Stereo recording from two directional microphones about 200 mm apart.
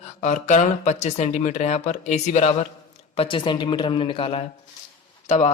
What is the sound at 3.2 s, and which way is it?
A man's voice, 25° left (ahead or behind).